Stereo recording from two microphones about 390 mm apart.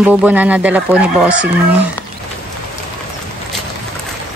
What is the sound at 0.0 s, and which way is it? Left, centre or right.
Speech, centre.